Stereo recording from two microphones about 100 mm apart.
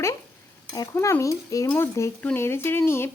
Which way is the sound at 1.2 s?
35° left (ahead or behind).